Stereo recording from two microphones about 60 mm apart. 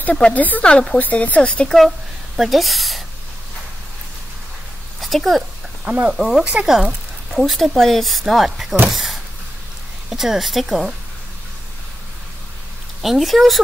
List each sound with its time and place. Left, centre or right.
0.0 s speech: left
1.9 s speech: centre
5.0 s speech: centre
5.9 s speech: centre
13.0 s speech: centre